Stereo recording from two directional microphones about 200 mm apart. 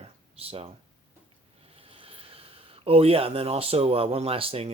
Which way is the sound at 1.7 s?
30° right (ahead or behind).